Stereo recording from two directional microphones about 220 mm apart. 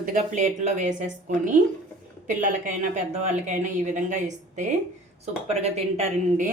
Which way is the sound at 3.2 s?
35° right (ahead or behind).